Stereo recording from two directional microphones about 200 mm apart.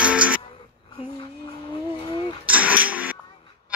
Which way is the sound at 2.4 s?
5° right (ahead or behind).